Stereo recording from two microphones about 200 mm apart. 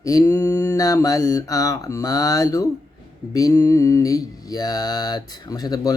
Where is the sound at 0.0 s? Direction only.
15° left (ahead or behind).